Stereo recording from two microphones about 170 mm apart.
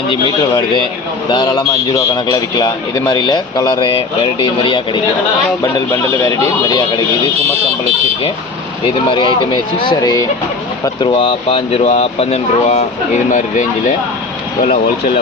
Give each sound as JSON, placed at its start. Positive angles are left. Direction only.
{"t": 1.3, "sound": "speech", "side_deg": 25}
{"t": 9.0, "sound": "speech", "side_deg": 30}
{"t": 11.1, "sound": "speech", "side_deg": 35}